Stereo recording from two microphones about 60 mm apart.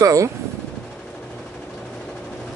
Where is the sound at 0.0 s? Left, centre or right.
Right.